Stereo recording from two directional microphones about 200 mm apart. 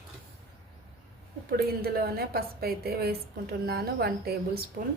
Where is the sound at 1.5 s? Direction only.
50° right (ahead or behind).